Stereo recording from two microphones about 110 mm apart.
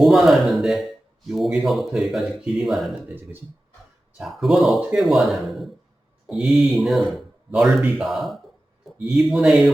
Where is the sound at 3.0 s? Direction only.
20° right (ahead or behind).